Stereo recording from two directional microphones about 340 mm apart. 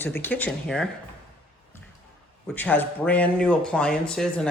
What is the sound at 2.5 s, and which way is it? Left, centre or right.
Speech, centre.